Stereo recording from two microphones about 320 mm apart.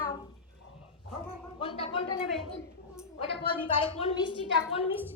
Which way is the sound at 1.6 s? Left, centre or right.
Centre.